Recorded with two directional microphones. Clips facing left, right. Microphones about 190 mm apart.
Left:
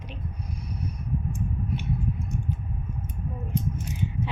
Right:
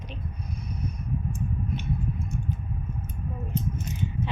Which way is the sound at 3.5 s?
15° left (ahead or behind).